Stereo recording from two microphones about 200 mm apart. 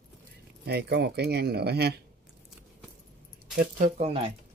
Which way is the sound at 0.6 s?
55° right (ahead or behind).